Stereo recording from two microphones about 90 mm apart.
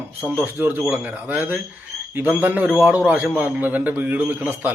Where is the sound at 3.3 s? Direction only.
20° right (ahead or behind).